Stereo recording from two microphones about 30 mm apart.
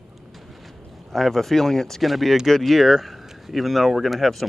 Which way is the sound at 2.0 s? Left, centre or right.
Centre.